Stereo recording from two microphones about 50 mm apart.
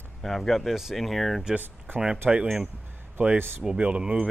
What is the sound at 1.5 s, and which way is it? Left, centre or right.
Speech, right.